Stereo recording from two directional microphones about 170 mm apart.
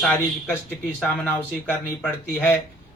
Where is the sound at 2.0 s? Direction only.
10° left (ahead or behind).